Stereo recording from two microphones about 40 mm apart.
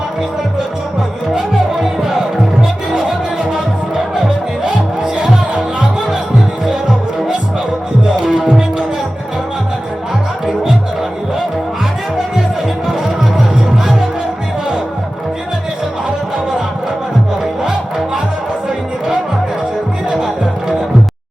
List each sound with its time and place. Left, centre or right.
1.3 s music: centre
3.5 s music: centre
8.2 s music: centre
17.6 s music: centre